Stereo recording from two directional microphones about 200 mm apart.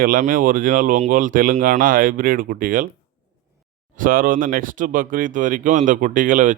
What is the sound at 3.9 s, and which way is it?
Speech, 45° right (ahead or behind).